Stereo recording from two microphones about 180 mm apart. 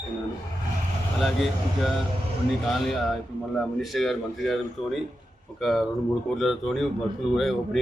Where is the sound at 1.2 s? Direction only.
Centre (ahead or behind).